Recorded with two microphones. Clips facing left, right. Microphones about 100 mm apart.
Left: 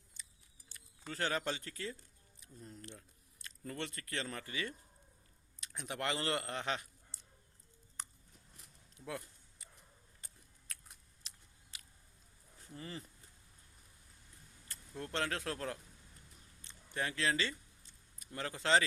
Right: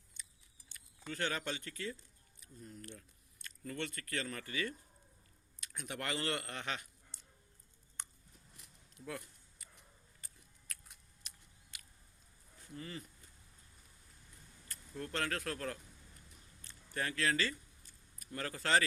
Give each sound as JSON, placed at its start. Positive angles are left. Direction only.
{"t": 0.7, "sound": "speech", "side_deg": 35}
{"t": 9.0, "sound": "speech", "side_deg": 30}
{"t": 10.2, "sound": "a sound", "side_deg": 30}
{"t": 12.6, "sound": "speech", "side_deg": 30}
{"t": 14.7, "sound": "speech", "side_deg": 30}
{"t": 16.6, "sound": "a sound", "side_deg": 20}